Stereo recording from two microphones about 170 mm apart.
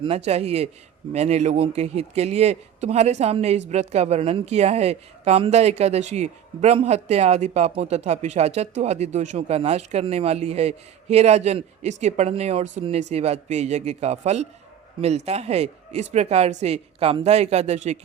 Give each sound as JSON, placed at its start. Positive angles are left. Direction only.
{"t": 0.0, "sound": "speech", "side_deg": -35}